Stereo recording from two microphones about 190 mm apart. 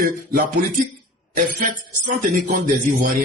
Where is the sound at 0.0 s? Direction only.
50° right (ahead or behind).